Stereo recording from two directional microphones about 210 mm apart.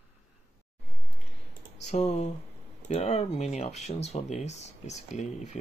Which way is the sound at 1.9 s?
30° left (ahead or behind).